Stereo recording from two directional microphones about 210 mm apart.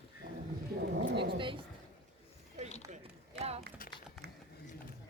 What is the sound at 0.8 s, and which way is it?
Speech, 55° right (ahead or behind).